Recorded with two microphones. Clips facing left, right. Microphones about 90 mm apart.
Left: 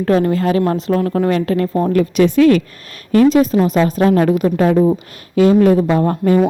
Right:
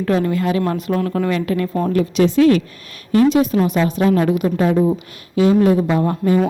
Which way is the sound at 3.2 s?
35° left (ahead or behind).